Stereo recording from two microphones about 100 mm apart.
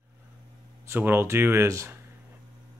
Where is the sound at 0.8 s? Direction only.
20° right (ahead or behind).